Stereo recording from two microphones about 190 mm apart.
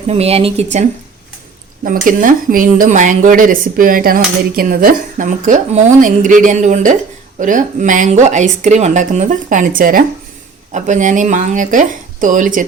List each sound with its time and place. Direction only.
0.1 s a woman's voice: 30° right (ahead or behind)
1.8 s a woman's voice: 45° right (ahead or behind)